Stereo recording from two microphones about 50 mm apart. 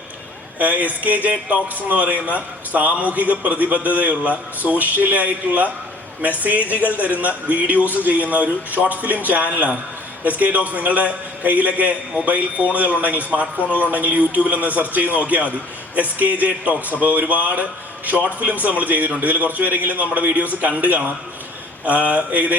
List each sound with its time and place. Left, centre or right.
0.6 s a man's voice: right
22.1 s a man's voice: right